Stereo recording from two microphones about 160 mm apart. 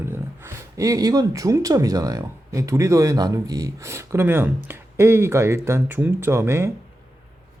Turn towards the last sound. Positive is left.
turn(degrees=-15)  # may be behind; listen again after turning